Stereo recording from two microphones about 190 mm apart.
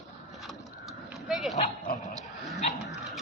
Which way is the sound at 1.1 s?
Centre (ahead or behind).